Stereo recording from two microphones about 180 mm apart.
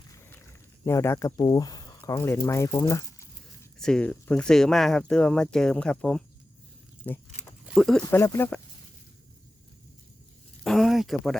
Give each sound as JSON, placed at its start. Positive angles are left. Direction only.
{"t": 0.1, "sound": "dog", "side_deg": 15}
{"t": 0.9, "sound": "speech", "side_deg": 15}
{"t": 3.8, "sound": "speech", "side_deg": 5}
{"t": 8.0, "sound": "speech", "side_deg": 15}
{"t": 10.6, "sound": "a sound", "side_deg": 0}